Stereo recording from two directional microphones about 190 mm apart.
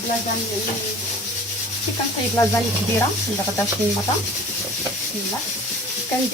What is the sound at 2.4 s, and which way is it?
Speech, 15° left (ahead or behind).